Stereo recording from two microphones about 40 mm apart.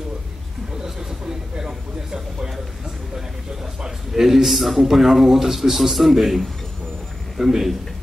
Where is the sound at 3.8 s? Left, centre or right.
Centre.